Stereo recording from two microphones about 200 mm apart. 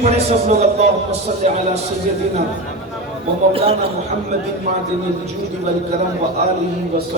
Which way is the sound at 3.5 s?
30° right (ahead or behind).